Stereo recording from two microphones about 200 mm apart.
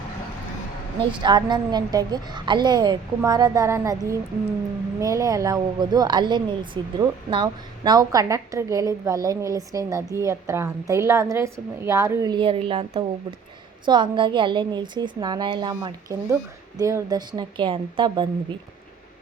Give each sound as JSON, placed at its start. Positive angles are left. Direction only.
{"t": 1.2, "sound": "a woman's voice", "side_deg": -20}